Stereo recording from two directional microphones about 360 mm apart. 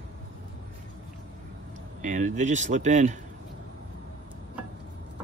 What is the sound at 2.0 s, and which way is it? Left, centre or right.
Speech, centre.